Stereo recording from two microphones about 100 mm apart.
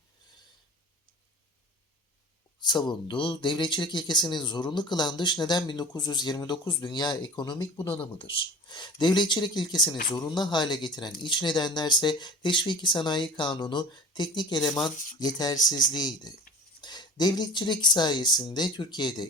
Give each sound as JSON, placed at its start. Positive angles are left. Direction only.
{"t": 2.6, "sound": "speech", "side_deg": 50}